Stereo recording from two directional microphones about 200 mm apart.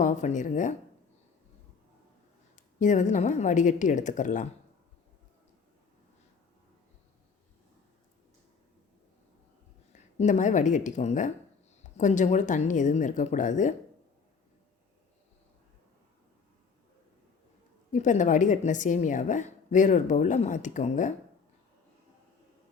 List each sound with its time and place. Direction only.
0.0 s a woman's voice: 40° left (ahead or behind)
2.6 s a woman's voice: 40° left (ahead or behind)
9.9 s a woman's voice: 35° left (ahead or behind)
17.9 s a woman's voice: 35° left (ahead or behind)